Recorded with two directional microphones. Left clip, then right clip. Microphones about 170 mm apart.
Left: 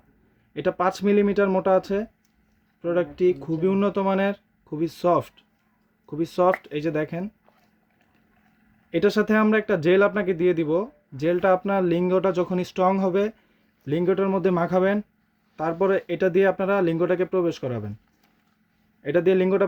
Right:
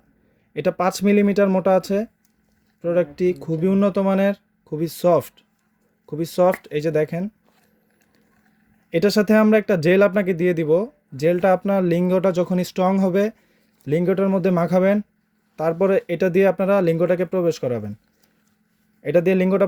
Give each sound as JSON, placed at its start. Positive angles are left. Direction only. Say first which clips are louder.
{"t": 0.5, "sound": "speech", "louder": "right 3 dB", "side_deg": -30}
{"t": 8.9, "sound": "speech", "louder": "right 3 dB", "side_deg": -30}
{"t": 19.0, "sound": "speech", "louder": "right 2 dB", "side_deg": -30}